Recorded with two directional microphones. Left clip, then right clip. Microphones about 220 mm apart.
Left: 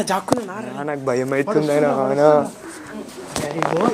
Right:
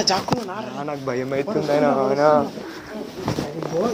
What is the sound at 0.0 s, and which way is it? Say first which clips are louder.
Speech: left 1 dB; 45° left (ahead or behind).